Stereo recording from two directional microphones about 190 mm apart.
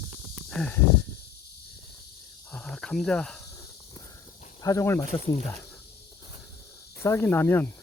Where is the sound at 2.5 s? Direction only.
5° left (ahead or behind).